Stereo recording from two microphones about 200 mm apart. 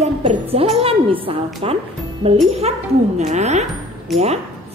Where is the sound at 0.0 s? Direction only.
30° right (ahead or behind).